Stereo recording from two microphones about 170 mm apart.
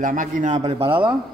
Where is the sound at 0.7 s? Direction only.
30° right (ahead or behind).